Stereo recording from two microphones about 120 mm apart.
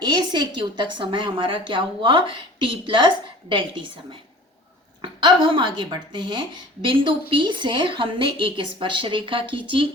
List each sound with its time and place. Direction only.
0.0 s a woman's voice: 40° right (ahead or behind)